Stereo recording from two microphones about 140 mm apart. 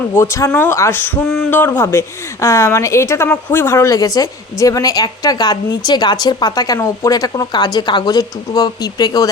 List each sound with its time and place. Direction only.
0.1 s a woman's voice: 20° left (ahead or behind)